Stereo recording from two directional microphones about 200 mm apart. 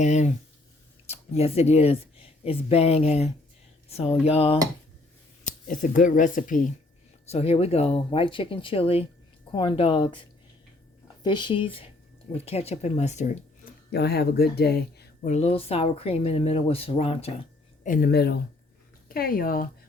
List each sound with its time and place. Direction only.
0.0 s speech: 35° left (ahead or behind)
7.3 s speech: 30° left (ahead or behind)
11.2 s speech: 25° left (ahead or behind)
13.9 s speech: 55° left (ahead or behind)
15.3 s speech: 35° left (ahead or behind)
17.8 s speech: 45° left (ahead or behind)